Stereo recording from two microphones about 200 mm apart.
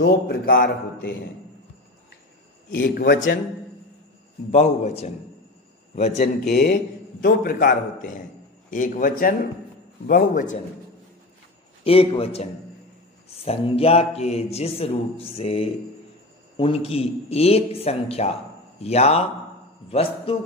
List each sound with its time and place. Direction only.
0.3 s speech: 50° left (ahead or behind)
2.7 s speech: 55° left (ahead or behind)
4.5 s a man's voice: 35° left (ahead or behind)
6.2 s speech: 55° left (ahead or behind)
6.7 s a man's voice: 45° left (ahead or behind)
11.8 s a man's voice: 30° left (ahead or behind)